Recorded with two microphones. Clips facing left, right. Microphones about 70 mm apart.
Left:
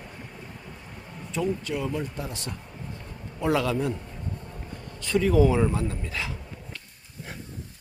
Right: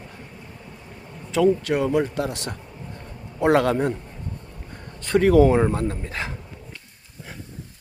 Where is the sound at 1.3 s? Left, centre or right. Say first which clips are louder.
Right 9 dB; right.